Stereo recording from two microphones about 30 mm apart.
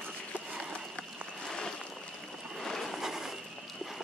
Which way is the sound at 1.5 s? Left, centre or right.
Centre.